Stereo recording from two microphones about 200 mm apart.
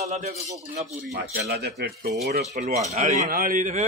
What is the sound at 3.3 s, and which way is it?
Speech, 45° right (ahead or behind).